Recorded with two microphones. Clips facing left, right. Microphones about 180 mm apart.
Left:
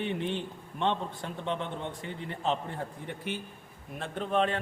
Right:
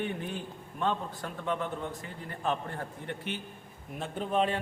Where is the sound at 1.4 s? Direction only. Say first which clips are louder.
Right 1 dB; 25° left (ahead or behind).